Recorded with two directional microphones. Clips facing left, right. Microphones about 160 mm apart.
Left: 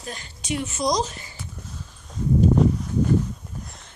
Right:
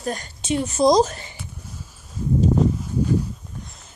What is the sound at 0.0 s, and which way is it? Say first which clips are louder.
Speech: right 9 dB; 45° right (ahead or behind).